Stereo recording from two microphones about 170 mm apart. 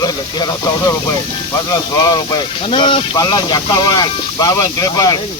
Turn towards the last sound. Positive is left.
turn(degrees=20)  # may be behind; listen again after turning